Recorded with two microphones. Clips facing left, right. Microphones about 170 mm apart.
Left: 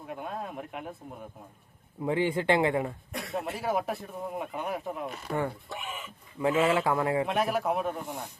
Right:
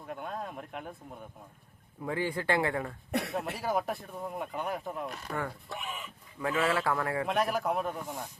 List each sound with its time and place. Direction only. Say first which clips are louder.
0.1 s speech: left 1 dB; 5° left (ahead or behind)
2.0 s a man's voice: left 5 dB; 20° left (ahead or behind)
3.1 s speech: right 6 dB; 70° right (ahead or behind)
3.3 s speech: left 6 dB; centre (ahead or behind)
6.4 s a man's voice: left 4 dB; 20° left (ahead or behind)
7.3 s speech: left 2 dB; centre (ahead or behind)